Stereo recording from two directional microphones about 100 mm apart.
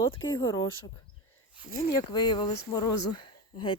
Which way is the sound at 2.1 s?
50° left (ahead or behind).